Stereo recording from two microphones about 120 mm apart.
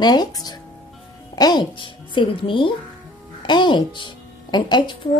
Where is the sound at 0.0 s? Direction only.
35° left (ahead or behind).